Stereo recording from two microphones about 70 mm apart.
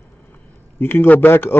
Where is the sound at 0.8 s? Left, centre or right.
Left.